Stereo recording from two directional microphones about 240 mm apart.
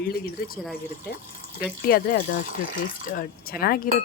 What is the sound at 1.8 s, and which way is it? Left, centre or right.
Speech, left.